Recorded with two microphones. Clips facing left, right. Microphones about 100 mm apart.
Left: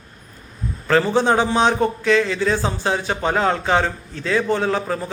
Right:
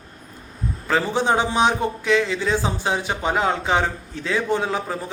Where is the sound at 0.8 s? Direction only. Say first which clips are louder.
Left 4 dB; 15° right (ahead or behind).